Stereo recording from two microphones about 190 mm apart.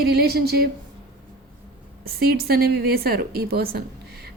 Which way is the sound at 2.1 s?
55° right (ahead or behind).